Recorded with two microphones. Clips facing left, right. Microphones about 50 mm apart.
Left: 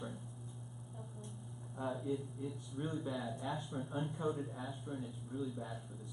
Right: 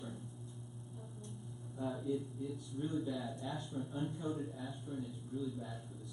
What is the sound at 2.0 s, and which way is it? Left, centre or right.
Speech, left.